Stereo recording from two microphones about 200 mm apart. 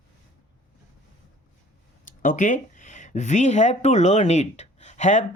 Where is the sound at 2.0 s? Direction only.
40° left (ahead or behind).